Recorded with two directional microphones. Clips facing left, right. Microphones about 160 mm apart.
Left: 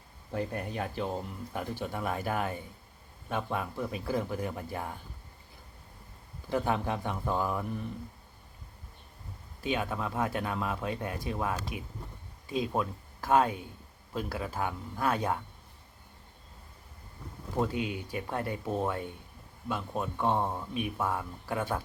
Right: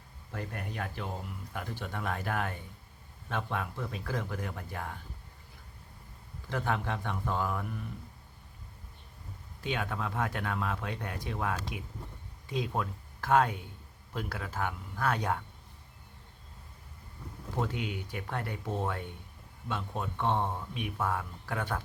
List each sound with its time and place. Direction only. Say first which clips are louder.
0.3 s speech: left 5 dB; 20° left (ahead or behind)
6.5 s speech: left 3 dB; 15° left (ahead or behind)
9.6 s speech: left 2 dB; 5° left (ahead or behind)
17.6 s speech: left 3 dB; 5° left (ahead or behind)